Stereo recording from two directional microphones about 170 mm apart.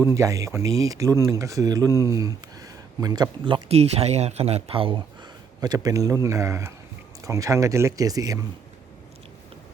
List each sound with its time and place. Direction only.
0.0 s speech: 15° right (ahead or behind)